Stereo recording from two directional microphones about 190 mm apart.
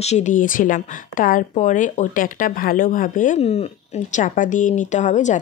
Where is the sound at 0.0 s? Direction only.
40° left (ahead or behind).